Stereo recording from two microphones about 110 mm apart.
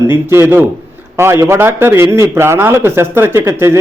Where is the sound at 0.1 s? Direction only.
20° right (ahead or behind).